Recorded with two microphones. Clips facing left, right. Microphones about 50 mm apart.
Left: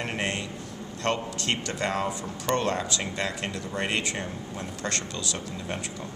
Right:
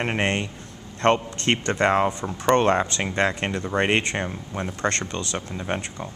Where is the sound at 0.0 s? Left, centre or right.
Right.